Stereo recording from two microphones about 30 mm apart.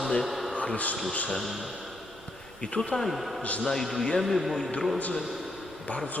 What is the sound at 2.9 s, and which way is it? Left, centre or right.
Speech, centre.